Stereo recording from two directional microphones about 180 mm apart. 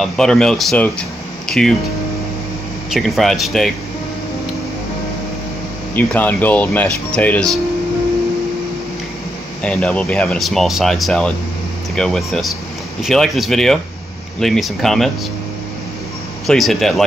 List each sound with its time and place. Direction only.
0.0 s speech: 5° left (ahead or behind)
2.9 s speech: centre (ahead or behind)
5.9 s speech: 10° left (ahead or behind)
9.6 s speech: 5° left (ahead or behind)
16.4 s speech: centre (ahead or behind)